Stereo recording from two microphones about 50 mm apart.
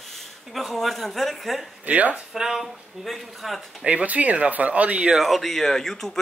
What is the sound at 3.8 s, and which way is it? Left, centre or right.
Speech, right.